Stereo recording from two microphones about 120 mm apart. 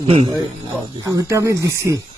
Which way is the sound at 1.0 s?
25° right (ahead or behind).